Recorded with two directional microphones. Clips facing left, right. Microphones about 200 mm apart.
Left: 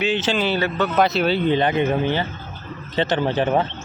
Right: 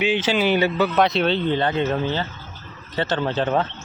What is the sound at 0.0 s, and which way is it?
Speech, 10° right (ahead or behind).